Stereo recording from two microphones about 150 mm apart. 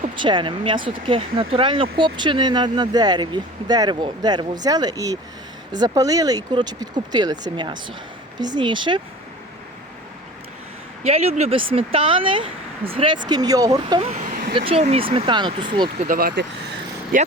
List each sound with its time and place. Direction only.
0.2 s speech: 30° right (ahead or behind)
11.0 s speech: 45° right (ahead or behind); by 14.0 s 25° right (ahead or behind)
14.0 s vehicle: 50° right (ahead or behind)
14.7 s speech: 40° right (ahead or behind)
16.0 s vehicle: 80° right